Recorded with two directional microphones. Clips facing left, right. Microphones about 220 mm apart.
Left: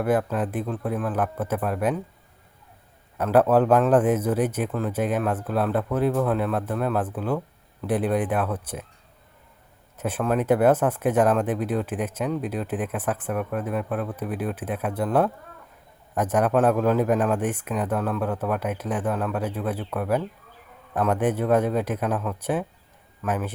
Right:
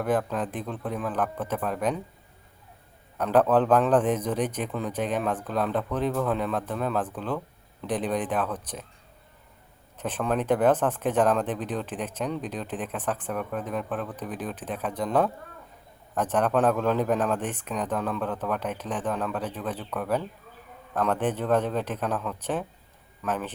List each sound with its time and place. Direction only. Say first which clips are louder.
0.0 s speech: left 3 dB; 10° left (ahead or behind)
3.2 s speech: left 3 dB; 5° left (ahead or behind)
10.0 s speech: left 3 dB; 10° left (ahead or behind)